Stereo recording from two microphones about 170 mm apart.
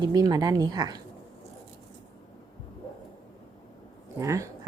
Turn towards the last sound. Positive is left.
turn(degrees=-20)  # may be behind; listen again after turning